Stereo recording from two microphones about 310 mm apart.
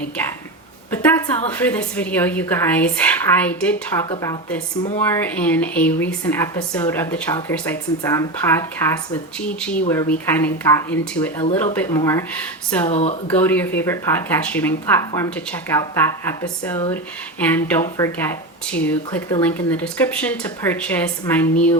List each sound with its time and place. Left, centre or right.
0.9 s a woman's voice: centre
12.9 s speech: left
13.2 s speech: centre